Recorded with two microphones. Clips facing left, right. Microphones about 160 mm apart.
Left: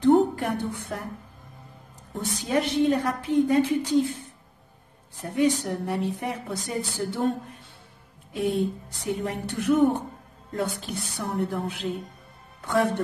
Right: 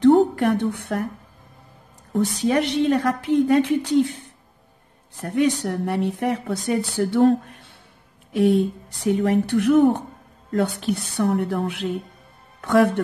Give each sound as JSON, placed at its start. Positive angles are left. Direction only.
{"t": 0.0, "sound": "a woman's voice", "side_deg": -75}
{"t": 2.1, "sound": "a woman's voice", "side_deg": -70}
{"t": 5.2, "sound": "a woman's voice", "side_deg": -70}